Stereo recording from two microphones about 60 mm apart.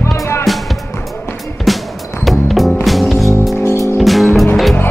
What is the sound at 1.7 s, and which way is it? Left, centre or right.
Music, centre.